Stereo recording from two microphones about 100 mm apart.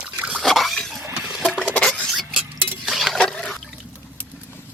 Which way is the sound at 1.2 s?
5° right (ahead or behind).